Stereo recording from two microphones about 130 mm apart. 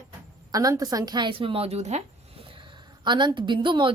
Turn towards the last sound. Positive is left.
turn(degrees=-40)  # may be behind; listen again after turning